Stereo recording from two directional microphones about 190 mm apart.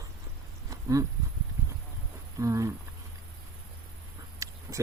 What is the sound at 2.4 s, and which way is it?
Speech, 15° right (ahead or behind).